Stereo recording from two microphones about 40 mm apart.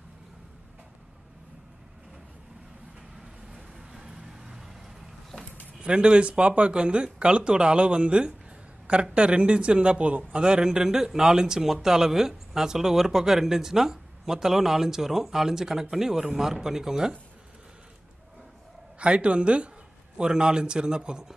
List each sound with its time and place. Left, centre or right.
3.7 s vehicle: centre
5.8 s speech: right
18.9 s speech: right